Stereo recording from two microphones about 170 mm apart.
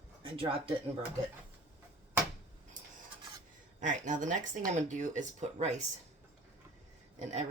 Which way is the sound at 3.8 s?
50° right (ahead or behind).